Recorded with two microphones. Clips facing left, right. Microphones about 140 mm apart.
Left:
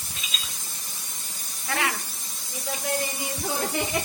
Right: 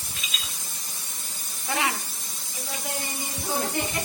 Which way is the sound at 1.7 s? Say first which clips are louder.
Right 1 dB; 20° right (ahead or behind).